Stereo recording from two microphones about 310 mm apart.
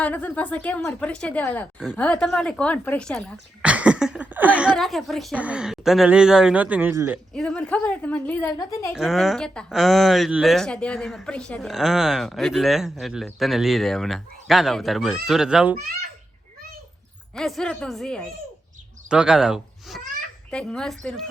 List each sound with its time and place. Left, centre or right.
0.0 s speech: centre
17.3 s speech: centre